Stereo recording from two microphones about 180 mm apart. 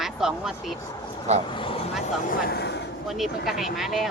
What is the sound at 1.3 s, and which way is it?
Speech, 40° right (ahead or behind).